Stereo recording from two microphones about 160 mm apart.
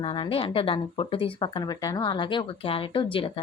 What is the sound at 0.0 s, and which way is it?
Speech, 35° left (ahead or behind).